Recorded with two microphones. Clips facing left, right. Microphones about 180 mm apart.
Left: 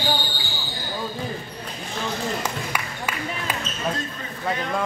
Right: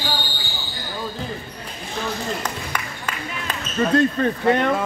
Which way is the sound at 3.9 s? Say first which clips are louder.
Right 15 dB; 65° right (ahead or behind).